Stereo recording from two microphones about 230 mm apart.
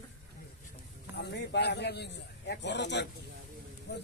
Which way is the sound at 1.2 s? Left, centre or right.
Left.